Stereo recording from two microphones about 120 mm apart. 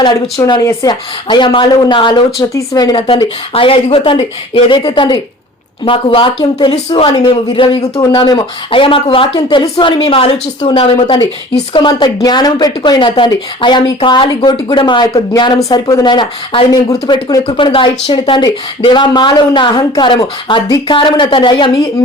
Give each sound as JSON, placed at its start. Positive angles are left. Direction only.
{"t": 0.0, "sound": "speech", "side_deg": 35}
{"t": 0.6, "sound": "speech", "side_deg": 25}
{"t": 3.5, "sound": "speech", "side_deg": 50}
{"t": 11.7, "sound": "speech", "side_deg": 40}
{"t": 15.5, "sound": "speech", "side_deg": 25}
{"t": 16.0, "sound": "speech", "side_deg": 40}
{"t": 17.4, "sound": "speech", "side_deg": 45}